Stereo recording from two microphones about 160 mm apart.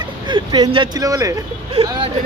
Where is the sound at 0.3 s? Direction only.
25° right (ahead or behind).